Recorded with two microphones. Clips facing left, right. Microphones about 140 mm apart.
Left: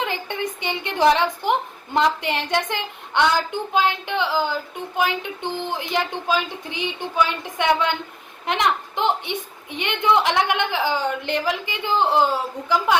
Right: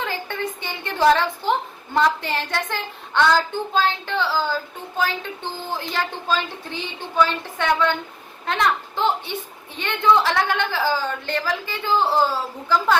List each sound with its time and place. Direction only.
0.0 s a woman's voice: 20° left (ahead or behind)